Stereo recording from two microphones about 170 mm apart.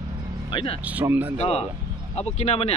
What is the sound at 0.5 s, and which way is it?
Speech, 30° left (ahead or behind).